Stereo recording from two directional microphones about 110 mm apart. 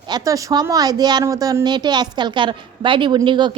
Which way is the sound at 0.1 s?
30° right (ahead or behind).